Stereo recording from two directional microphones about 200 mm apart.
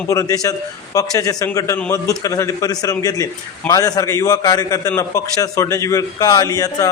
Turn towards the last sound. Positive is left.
turn(degrees=20)  # may be behind; listen again after turning